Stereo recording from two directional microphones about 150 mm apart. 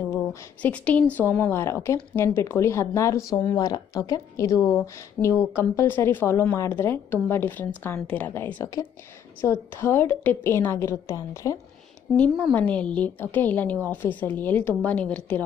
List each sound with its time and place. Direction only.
0.1 s a woman's voice: 15° left (ahead or behind)
12.5 s a woman's voice: 10° left (ahead or behind)